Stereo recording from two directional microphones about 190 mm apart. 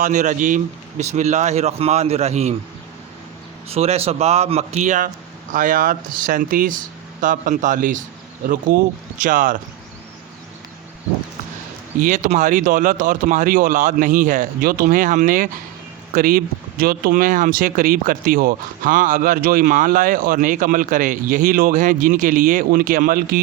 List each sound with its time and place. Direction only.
0.0 s speech: 40° right (ahead or behind)
3.7 s speech: 30° right (ahead or behind)
11.9 s speech: 40° right (ahead or behind)